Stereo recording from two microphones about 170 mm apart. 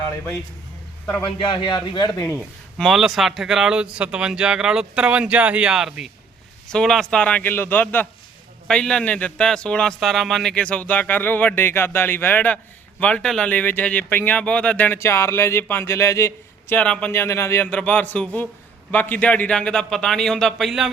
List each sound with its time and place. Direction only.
1.2 s speech: 30° left (ahead or behind)
2.7 s speech: centre (ahead or behind)